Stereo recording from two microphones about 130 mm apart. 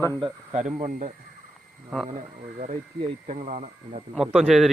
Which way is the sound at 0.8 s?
80° right.